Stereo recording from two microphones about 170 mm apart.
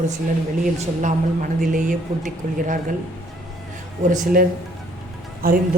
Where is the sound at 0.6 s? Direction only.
50° right (ahead or behind).